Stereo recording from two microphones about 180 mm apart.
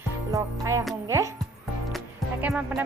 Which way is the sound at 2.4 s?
5° right (ahead or behind).